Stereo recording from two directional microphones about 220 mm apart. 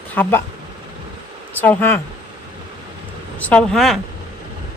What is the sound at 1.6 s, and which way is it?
Speech, 10° left (ahead or behind).